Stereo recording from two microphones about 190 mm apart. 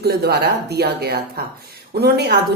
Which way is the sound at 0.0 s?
55° right (ahead or behind).